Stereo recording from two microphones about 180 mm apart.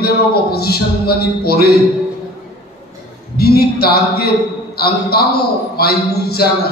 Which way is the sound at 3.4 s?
60° left (ahead or behind).